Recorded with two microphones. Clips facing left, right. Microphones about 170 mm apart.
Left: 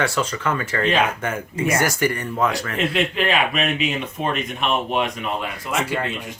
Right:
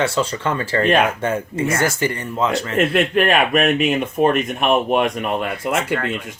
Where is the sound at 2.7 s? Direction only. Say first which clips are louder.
Right 5 dB; 50° right (ahead or behind).